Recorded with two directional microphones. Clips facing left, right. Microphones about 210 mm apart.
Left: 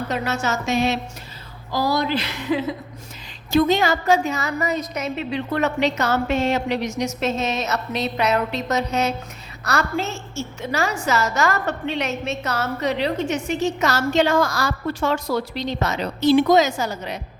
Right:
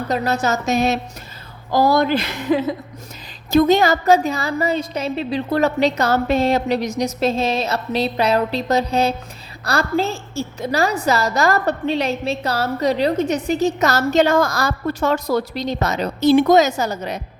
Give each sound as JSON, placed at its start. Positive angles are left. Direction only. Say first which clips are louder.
{"t": 0.1, "sound": "a woman's voice", "louder": "right 6 dB", "side_deg": -35}
{"t": 1.7, "sound": "a woman's voice", "louder": "right 6 dB", "side_deg": -50}